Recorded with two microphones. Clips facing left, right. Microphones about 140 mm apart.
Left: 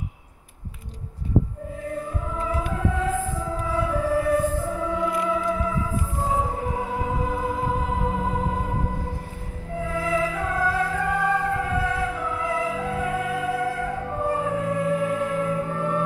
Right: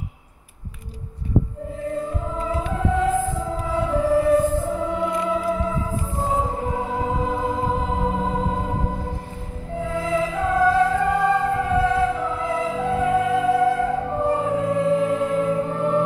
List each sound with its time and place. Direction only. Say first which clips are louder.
3.7 s music: right 4 dB; 25° right (ahead or behind)
6.8 s music: right 3 dB; 25° right (ahead or behind)
9.8 s music: right 2 dB; 25° right (ahead or behind)